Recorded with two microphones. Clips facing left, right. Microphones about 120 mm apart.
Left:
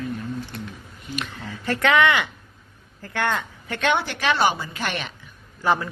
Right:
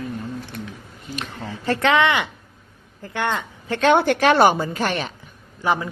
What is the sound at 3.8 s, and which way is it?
A woman's voice, 45° right (ahead or behind).